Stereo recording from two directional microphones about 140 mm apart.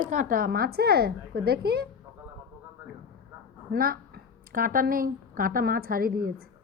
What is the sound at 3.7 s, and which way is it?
A woman's voice, 90° right.